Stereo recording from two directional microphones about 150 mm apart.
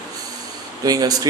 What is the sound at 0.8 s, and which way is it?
Speech, 25° right (ahead or behind).